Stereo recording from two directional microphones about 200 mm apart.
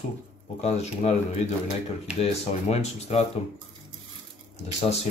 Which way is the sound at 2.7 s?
30° left (ahead or behind).